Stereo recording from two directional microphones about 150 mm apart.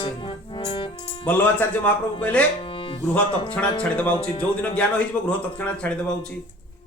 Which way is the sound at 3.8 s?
10° left (ahead or behind).